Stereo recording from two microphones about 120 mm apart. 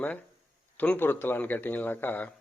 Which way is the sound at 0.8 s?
15° left (ahead or behind).